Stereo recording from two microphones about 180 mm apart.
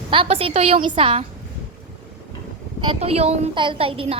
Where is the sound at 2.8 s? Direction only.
30° right (ahead or behind).